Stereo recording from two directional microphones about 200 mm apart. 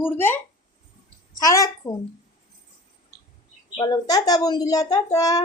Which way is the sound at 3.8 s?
20° left (ahead or behind).